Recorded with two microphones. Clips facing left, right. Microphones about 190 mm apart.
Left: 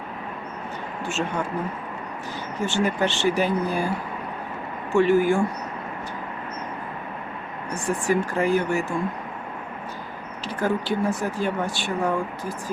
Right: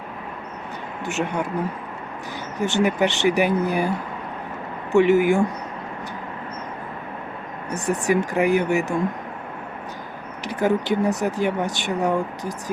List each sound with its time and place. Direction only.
1.0 s speech: 20° right (ahead or behind)
2.6 s speech: 15° right (ahead or behind)
7.9 s speech: 20° right (ahead or behind)
10.4 s speech: 15° right (ahead or behind)